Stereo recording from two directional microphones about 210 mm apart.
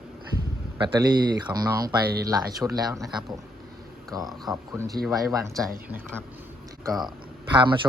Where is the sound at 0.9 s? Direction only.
20° right (ahead or behind).